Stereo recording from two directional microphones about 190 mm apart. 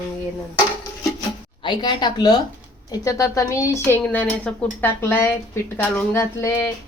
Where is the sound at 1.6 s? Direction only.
25° left (ahead or behind).